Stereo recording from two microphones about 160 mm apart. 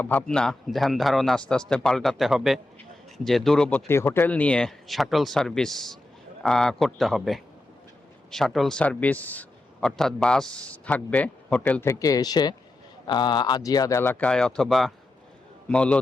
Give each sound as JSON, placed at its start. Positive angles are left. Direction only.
{"t": 0.0, "sound": "a man's voice", "side_deg": 10}